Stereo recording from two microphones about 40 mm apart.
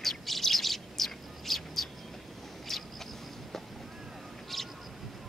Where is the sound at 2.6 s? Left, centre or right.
Centre.